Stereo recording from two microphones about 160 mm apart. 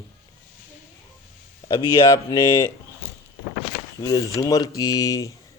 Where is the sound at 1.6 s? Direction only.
25° left (ahead or behind).